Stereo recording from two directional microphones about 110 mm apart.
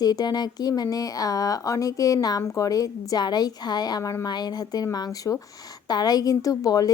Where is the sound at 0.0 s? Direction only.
35° left (ahead or behind).